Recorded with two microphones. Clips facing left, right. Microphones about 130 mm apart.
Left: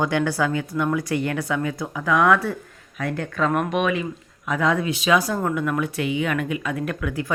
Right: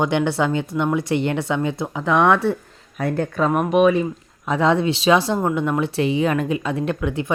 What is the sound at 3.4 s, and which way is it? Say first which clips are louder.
Speech: right 2 dB; 10° right (ahead or behind).